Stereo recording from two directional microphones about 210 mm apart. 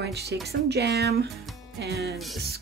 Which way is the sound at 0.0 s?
50° right (ahead or behind).